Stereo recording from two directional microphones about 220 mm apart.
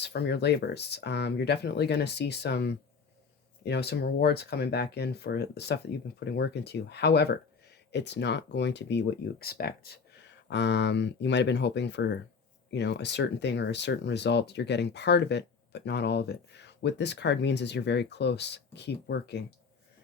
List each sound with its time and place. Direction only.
0.0 s speech: 50° left (ahead or behind)